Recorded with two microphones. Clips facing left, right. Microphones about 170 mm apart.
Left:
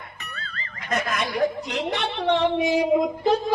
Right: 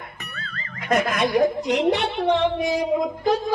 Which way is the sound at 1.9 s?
10° right (ahead or behind).